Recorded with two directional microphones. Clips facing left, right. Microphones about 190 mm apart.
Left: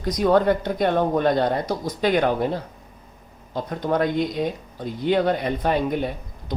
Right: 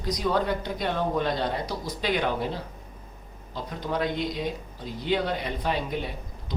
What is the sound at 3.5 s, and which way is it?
Speech, 55° left (ahead or behind).